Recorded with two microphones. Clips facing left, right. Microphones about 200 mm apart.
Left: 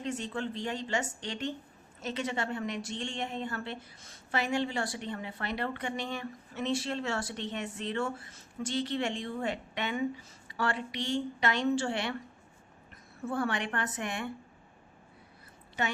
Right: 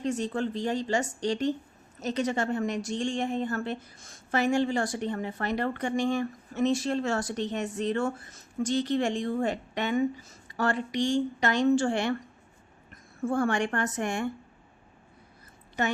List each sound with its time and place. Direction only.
0.0 s a woman's voice: 40° right (ahead or behind)
13.2 s a woman's voice: 45° right (ahead or behind)